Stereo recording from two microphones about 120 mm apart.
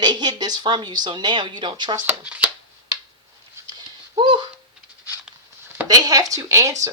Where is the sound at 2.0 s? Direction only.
10° right (ahead or behind).